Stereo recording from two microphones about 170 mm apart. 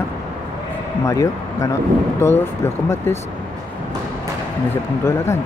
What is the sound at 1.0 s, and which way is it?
Speech, 20° left (ahead or behind).